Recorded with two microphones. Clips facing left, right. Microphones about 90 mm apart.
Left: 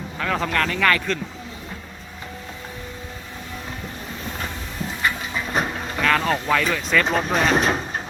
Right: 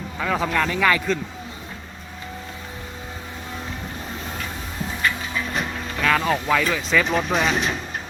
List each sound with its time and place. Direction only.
0.2 s speech: 5° right (ahead or behind)
6.0 s speech: centre (ahead or behind)
7.5 s speech: 40° left (ahead or behind)